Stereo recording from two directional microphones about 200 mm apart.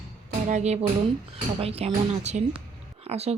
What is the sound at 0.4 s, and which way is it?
Speech, 35° right (ahead or behind).